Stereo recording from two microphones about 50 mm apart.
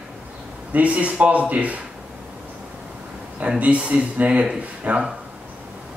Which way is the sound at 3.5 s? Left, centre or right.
Right.